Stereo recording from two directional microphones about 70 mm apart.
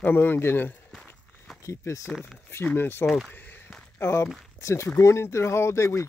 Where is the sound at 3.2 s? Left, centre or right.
Left.